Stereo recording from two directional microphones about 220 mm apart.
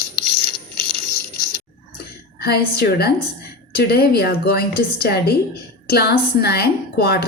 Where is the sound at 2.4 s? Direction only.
45° left (ahead or behind).